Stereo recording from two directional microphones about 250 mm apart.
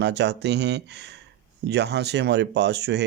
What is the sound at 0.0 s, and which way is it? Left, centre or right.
Speech, right.